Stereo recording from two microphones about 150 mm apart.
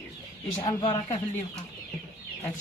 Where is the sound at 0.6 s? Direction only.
25° left (ahead or behind).